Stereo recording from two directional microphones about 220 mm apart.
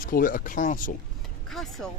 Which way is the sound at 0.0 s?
40° left (ahead or behind).